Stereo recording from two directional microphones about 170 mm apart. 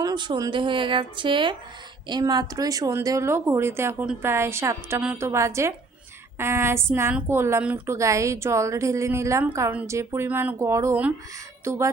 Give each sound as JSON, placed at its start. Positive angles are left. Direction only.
{"t": 0.0, "sound": "a woman's voice", "side_deg": -25}